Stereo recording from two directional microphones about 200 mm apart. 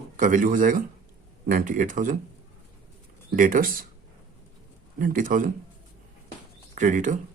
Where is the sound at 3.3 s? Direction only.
45° right (ahead or behind).